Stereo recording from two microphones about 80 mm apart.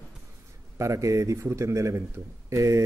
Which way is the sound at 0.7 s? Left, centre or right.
Right.